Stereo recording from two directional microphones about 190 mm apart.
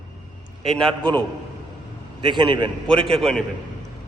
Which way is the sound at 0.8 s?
25° right (ahead or behind).